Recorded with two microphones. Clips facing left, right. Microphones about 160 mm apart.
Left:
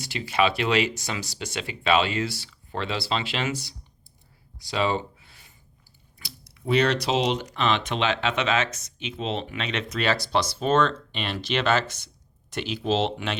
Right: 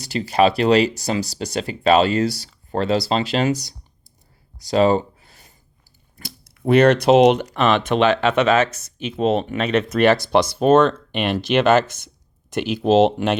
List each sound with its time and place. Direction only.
0.0 s speech: 40° right (ahead or behind)
4.6 s a sound: 40° right (ahead or behind)
6.1 s speech: 50° right (ahead or behind)